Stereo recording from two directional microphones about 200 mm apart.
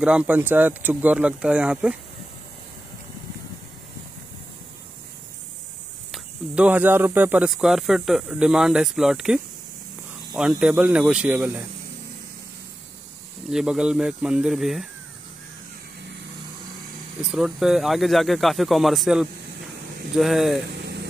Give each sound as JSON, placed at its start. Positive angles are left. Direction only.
{"t": 0.0, "sound": "speech", "side_deg": -5}
{"t": 6.1, "sound": "speech", "side_deg": -5}
{"t": 13.5, "sound": "speech", "side_deg": -5}
{"t": 17.2, "sound": "speech", "side_deg": -5}
{"t": 20.7, "sound": "vehicle", "side_deg": -60}